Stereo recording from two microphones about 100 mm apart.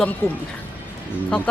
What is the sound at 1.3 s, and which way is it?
Speech, 10° left (ahead or behind).